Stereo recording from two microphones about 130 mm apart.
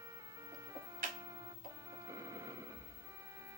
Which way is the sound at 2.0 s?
25° right (ahead or behind).